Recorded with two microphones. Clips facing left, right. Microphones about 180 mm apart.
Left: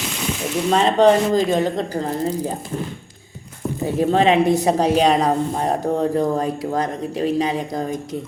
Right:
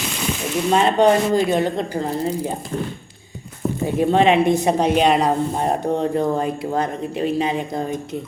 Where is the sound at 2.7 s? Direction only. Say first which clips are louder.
Right 1 dB; 5° left (ahead or behind).